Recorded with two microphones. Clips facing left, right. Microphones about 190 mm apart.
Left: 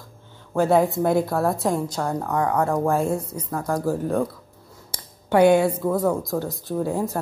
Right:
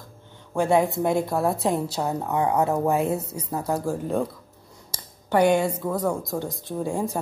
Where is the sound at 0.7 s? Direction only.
Centre (ahead or behind).